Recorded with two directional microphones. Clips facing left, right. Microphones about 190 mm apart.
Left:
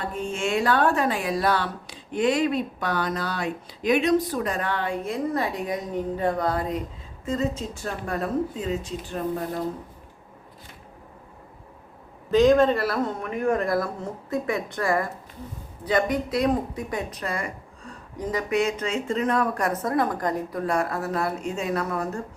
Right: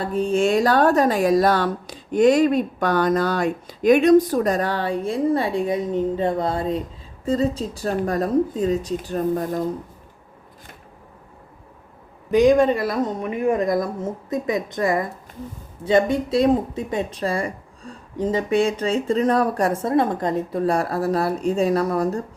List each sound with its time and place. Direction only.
0.0 s speech: 35° right (ahead or behind)
12.3 s speech: 15° right (ahead or behind); by 22.2 s 35° right (ahead or behind)